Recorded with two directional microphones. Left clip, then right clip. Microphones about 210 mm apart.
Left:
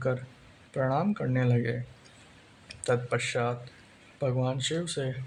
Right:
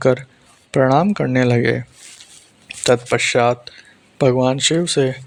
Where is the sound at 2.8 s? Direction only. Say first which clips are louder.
Right 13 dB; 40° right (ahead or behind).